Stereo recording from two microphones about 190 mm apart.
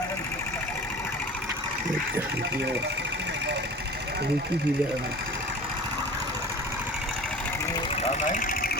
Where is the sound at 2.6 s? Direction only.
60° right (ahead or behind).